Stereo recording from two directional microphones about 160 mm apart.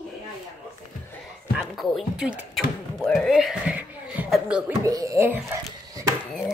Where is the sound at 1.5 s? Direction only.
Centre (ahead or behind).